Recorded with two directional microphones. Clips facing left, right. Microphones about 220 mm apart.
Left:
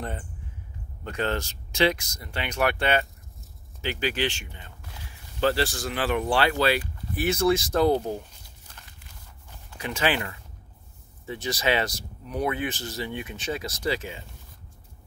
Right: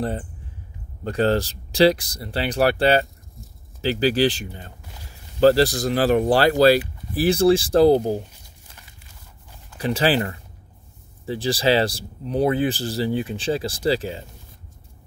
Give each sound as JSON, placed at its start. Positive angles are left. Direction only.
{"t": 0.0, "sound": "speech", "side_deg": -35}
{"t": 9.8, "sound": "speech", "side_deg": -35}